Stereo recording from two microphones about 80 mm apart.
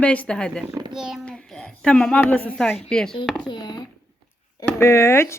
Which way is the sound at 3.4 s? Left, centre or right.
Left.